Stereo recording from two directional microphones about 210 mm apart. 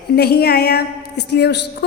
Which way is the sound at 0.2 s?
50° left (ahead or behind).